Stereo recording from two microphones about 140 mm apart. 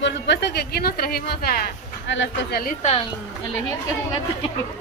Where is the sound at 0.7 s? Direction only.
90° left.